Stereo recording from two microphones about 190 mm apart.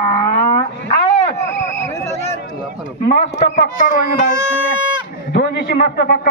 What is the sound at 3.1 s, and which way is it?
Speech, 45° left (ahead or behind).